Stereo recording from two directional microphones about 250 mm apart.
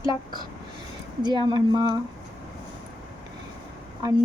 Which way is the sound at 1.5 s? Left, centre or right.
Centre.